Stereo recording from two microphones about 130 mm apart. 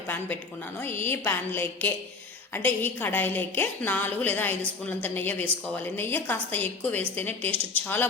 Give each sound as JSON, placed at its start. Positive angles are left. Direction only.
{"t": 0.8, "sound": "a woman's voice", "side_deg": 15}